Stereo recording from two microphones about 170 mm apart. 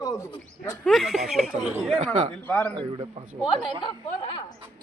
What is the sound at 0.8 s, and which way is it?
Speech, centre (ahead or behind).